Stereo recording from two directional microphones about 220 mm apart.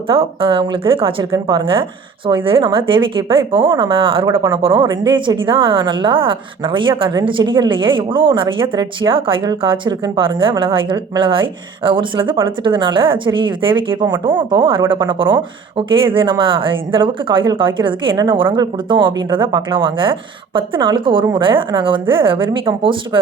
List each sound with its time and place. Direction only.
0.1 s speech: 25° right (ahead or behind)